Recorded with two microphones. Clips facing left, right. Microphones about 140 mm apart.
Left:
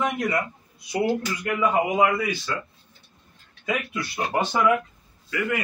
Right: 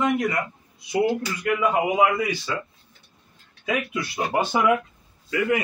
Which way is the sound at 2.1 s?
15° right (ahead or behind).